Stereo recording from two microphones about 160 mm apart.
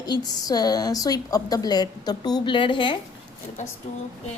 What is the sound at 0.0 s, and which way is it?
A woman's voice, 25° left (ahead or behind).